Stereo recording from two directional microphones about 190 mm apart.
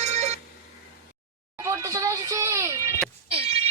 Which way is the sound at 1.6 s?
15° right (ahead or behind).